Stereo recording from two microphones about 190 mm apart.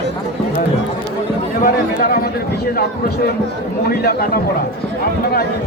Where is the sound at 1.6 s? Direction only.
50° left (ahead or behind).